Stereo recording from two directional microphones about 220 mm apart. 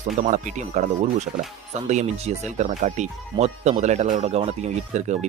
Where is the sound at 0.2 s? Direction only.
35° right (ahead or behind).